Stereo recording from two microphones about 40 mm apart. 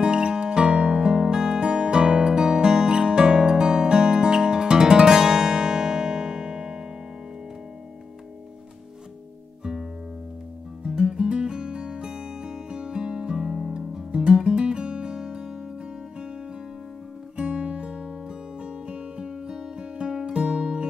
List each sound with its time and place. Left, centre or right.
0.0 s music: right
10.8 s music: centre
14.2 s music: right
17.4 s music: right